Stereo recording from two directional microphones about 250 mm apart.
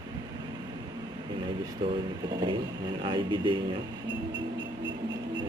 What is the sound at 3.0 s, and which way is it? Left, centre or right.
Speech, centre.